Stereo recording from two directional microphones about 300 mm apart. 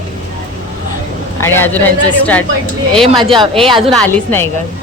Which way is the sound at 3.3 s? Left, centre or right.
Centre.